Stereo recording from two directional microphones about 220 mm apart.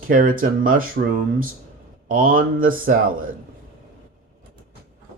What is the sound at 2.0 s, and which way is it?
Speech, 40° right (ahead or behind).